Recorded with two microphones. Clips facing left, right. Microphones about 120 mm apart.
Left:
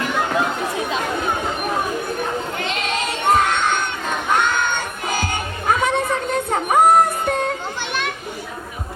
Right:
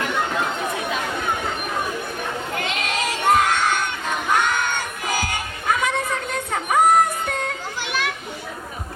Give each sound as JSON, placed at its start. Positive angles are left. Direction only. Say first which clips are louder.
{"t": 2.6, "sound": "child singing", "louder": "left 2 dB", "side_deg": 25}
{"t": 4.4, "sound": "music", "louder": "left 2 dB", "side_deg": 25}